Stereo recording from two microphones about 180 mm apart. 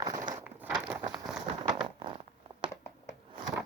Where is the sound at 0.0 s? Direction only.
25° right (ahead or behind).